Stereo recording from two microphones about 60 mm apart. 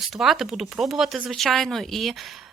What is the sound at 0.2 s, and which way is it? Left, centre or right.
Speech, centre.